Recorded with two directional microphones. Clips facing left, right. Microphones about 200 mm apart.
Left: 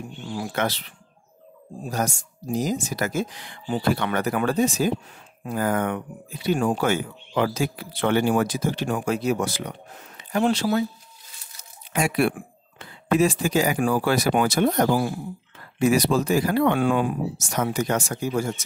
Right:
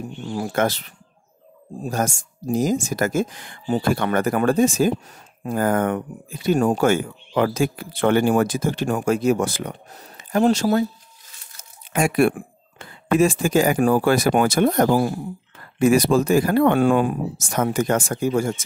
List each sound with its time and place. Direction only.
0.3 s speech: 45° right (ahead or behind)
11.9 s speech: 50° right (ahead or behind)